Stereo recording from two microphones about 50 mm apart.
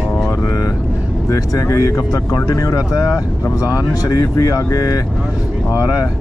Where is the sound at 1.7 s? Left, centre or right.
Left.